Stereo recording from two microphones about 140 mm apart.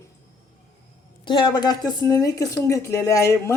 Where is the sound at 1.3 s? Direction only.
35° left (ahead or behind).